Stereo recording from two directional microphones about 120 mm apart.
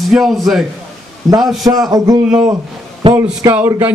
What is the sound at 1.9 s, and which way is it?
Speech, 30° right (ahead or behind).